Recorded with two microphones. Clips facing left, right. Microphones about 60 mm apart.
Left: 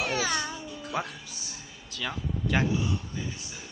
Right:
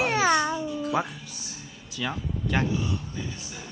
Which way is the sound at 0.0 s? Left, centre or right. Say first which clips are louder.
Right 7 dB; right.